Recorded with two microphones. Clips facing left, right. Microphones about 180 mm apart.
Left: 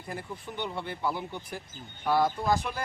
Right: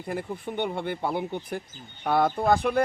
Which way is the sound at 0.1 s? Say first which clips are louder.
Right 7 dB; 60° right (ahead or behind).